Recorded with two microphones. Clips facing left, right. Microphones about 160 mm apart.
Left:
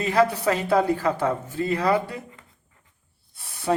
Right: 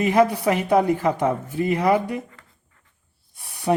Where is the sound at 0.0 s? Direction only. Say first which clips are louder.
Right 3 dB; 15° right (ahead or behind).